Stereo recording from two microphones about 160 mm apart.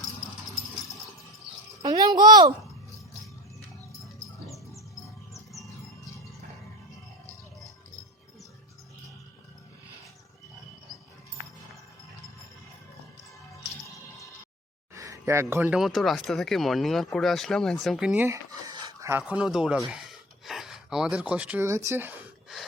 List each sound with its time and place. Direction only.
1.8 s insect: 25° right (ahead or behind)
5.5 s music: centre (ahead or behind)
14.9 s speech: 20° right (ahead or behind)
18.7 s a sound: 25° right (ahead or behind)